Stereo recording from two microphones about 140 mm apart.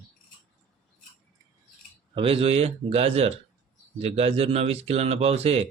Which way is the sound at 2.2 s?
45° right (ahead or behind).